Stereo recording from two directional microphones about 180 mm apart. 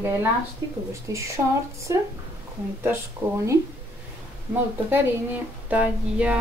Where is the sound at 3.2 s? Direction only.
10° right (ahead or behind).